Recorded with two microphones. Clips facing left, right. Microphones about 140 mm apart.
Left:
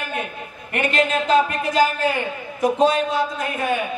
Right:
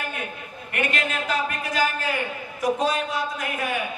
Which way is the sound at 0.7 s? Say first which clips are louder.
Left 6 dB; 25° left (ahead or behind).